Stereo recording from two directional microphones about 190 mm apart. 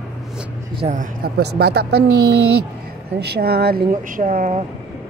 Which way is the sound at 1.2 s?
60° right (ahead or behind).